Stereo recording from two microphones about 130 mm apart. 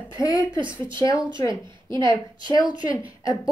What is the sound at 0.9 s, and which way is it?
A woman's voice, 25° left (ahead or behind).